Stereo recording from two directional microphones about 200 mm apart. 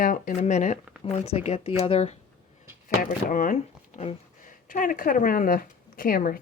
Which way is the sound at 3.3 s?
40° left (ahead or behind).